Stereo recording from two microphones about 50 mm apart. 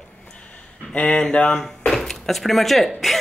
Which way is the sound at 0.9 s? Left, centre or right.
Left.